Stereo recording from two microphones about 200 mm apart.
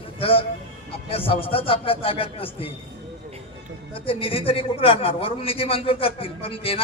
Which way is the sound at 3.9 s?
25° left (ahead or behind).